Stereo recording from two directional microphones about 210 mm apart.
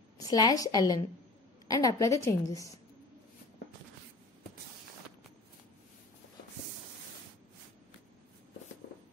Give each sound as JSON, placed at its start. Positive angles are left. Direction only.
{"t": 0.2, "sound": "a woman's voice", "side_deg": 15}